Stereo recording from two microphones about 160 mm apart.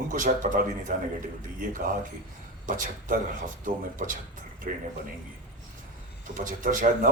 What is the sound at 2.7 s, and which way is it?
A man's voice, 55° right (ahead or behind).